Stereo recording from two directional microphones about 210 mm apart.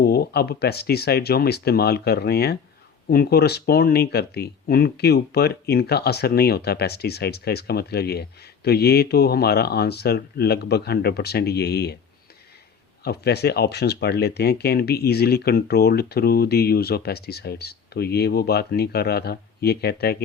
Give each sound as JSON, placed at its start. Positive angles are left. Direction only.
{"t": 0.0, "sound": "speech", "side_deg": 45}
{"t": 13.1, "sound": "speech", "side_deg": 50}